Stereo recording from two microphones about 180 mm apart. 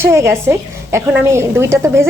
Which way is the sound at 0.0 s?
15° right (ahead or behind).